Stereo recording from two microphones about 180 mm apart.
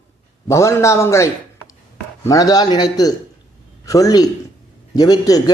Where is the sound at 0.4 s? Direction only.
15° left (ahead or behind).